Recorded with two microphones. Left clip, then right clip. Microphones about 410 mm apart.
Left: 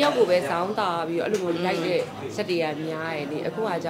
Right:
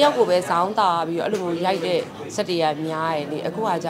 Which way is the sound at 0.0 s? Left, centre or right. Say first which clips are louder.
Right 3 dB; centre.